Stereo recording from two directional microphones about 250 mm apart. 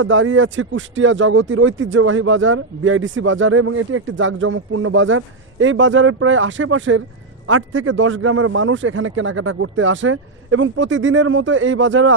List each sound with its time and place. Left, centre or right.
0.0 s a man's voice: right